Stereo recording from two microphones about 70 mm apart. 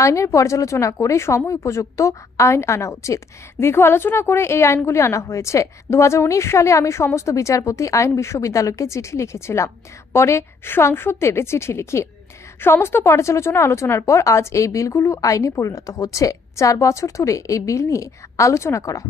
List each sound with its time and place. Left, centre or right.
0.0 s a woman's voice: left